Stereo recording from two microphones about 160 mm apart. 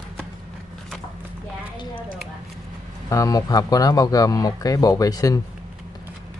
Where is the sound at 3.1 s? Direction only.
20° left (ahead or behind).